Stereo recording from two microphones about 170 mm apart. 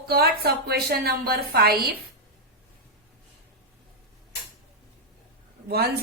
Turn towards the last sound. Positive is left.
turn(degrees=-65)  # may be behind; listen again after turning